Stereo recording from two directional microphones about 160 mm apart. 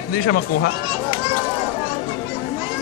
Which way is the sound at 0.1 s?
65° left (ahead or behind).